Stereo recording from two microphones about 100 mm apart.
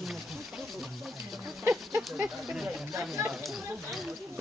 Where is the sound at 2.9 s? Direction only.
25° right (ahead or behind).